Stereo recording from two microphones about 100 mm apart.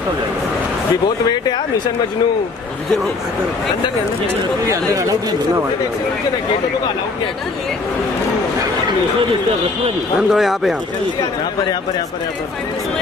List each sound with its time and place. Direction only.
4.6 s speech: 35° right (ahead or behind)
10.3 s speech: 5° right (ahead or behind)